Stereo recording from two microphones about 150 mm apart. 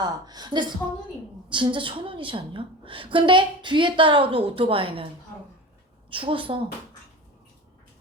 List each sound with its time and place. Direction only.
0.0 s a woman's voice: 25° right (ahead or behind)
6.1 s a woman's voice: 35° right (ahead or behind)